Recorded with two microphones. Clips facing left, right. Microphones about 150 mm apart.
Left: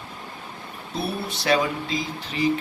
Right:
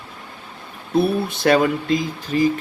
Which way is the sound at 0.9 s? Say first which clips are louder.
Right 10 dB; 50° right (ahead or behind).